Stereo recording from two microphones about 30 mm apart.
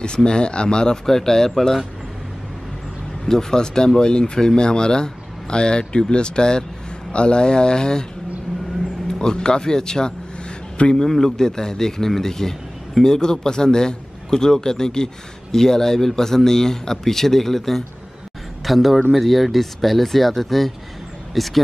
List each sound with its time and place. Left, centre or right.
0.0 s speech: left
1.0 s speech: centre
3.3 s speech: centre
9.0 s a man's voice: left; by 21.5 s centre